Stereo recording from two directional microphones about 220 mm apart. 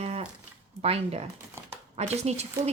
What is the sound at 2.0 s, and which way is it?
Speech, 30° right (ahead or behind).